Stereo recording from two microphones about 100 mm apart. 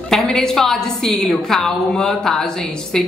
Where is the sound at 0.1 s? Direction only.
5° left (ahead or behind).